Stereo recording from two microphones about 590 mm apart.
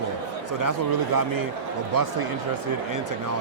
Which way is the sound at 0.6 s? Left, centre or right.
Right.